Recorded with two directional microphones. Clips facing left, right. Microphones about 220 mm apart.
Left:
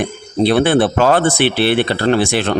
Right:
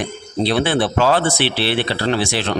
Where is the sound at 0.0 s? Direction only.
55° left (ahead or behind).